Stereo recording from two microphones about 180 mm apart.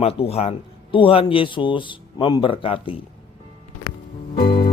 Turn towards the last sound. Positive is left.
turn(degrees=25)  # may be behind; listen again after turning